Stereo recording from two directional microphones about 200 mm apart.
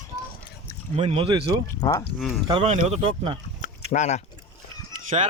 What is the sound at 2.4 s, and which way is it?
Speech, 30° right (ahead or behind).